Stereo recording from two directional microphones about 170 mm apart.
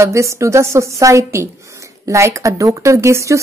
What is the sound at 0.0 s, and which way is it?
A woman's voice, 15° right (ahead or behind).